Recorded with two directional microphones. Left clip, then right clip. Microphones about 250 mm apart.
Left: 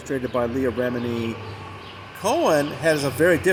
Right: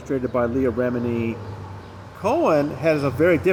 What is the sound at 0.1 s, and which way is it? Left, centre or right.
Speech, left.